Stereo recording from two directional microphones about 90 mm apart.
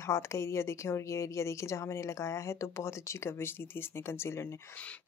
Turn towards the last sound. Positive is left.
turn(degrees=30)  # may be behind; listen again after turning